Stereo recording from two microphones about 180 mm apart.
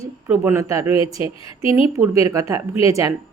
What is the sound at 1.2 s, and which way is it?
Speech, 30° left (ahead or behind).